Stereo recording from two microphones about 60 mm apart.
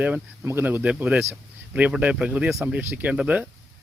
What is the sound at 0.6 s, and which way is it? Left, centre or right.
Speech, right.